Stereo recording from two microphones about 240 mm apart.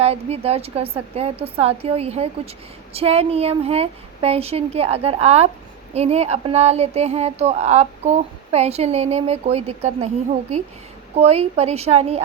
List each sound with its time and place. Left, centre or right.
0.0 s speech: right
11.2 s speech: right